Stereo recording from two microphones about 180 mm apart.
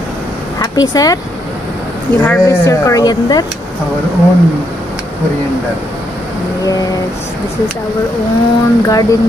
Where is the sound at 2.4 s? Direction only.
15° left (ahead or behind).